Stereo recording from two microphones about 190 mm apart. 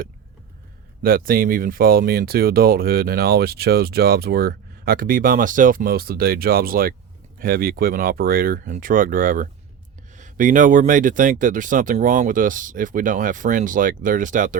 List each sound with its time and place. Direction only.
1.0 s speech: 50° right (ahead or behind)